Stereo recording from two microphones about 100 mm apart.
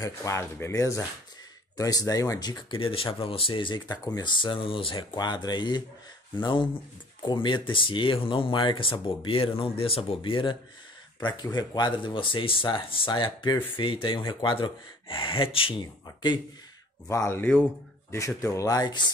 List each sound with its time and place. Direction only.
0.0 s speech: 30° left (ahead or behind)
2.7 s speech: 65° left (ahead or behind)
3.9 s speech: 40° left (ahead or behind)
11.1 s speech: 45° left (ahead or behind); by 15.7 s 65° left (ahead or behind)
17.1 s speech: 25° left (ahead or behind)
18.1 s speech: 30° left (ahead or behind)